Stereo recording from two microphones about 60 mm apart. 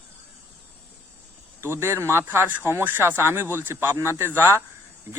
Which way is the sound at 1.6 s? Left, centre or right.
Right.